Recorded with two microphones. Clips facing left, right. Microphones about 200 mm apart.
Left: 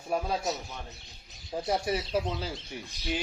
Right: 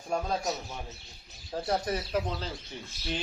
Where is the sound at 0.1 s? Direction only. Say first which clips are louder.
Left 1 dB; 5° left (ahead or behind).